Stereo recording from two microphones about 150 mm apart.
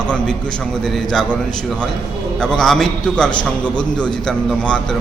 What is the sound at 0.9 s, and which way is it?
Speech, centre (ahead or behind).